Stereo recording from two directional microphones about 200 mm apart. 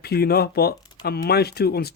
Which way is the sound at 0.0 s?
50° left (ahead or behind).